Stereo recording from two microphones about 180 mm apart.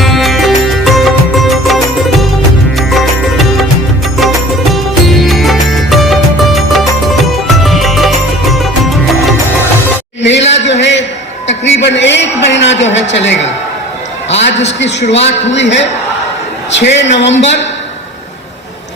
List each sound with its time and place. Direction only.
0.0 s music: centre (ahead or behind)
4.7 s music: centre (ahead or behind)
10.2 s a sound: 80° left
14.6 s a woman's voice: 75° left (ahead or behind)